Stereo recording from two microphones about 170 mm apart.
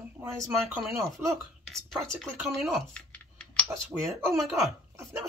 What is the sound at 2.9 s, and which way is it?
Typing, 5° left (ahead or behind).